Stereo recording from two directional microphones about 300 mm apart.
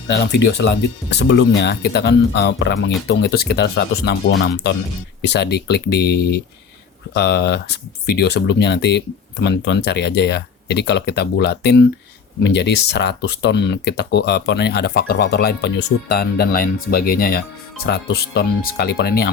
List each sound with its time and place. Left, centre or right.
0.2 s speech: left